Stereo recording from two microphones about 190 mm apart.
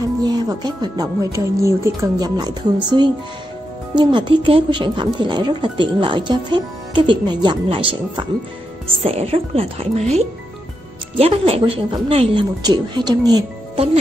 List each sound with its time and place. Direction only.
0.2 s speech: 20° right (ahead or behind)